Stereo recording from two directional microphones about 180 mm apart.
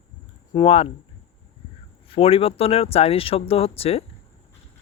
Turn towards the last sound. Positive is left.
turn(degrees=35)  # may be behind; listen again after turning